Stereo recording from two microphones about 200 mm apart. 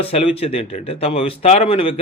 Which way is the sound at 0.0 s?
30° left (ahead or behind).